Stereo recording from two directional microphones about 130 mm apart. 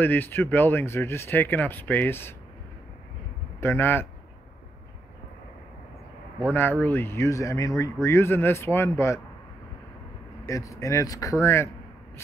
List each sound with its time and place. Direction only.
0.0 s speech: 15° left (ahead or behind)
3.6 s speech: 15° left (ahead or behind)
6.5 s speech: 15° left (ahead or behind)
10.4 s speech: 25° left (ahead or behind)